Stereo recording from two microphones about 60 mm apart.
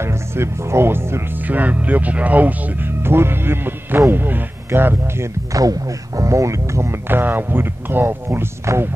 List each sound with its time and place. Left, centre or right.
0.0 s speech: right
1.4 s speech: right
5.5 s speech: right
8.3 s speech: right